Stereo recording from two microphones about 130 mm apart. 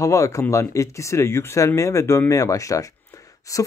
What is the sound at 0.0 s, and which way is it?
Speech, 25° left (ahead or behind).